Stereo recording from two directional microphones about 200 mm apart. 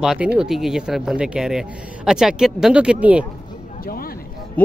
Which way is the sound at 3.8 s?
45° left (ahead or behind).